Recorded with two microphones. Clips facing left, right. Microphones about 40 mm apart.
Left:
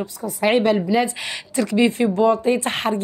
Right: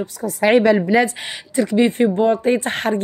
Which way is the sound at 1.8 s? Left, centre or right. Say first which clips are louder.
Left 2 dB; right.